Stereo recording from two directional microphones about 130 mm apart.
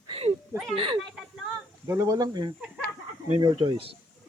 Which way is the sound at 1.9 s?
25° right (ahead or behind).